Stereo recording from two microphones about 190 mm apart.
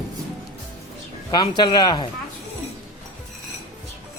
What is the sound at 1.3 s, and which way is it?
Speech, 25° left (ahead or behind).